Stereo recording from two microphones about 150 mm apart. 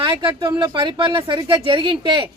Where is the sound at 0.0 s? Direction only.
35° right (ahead or behind).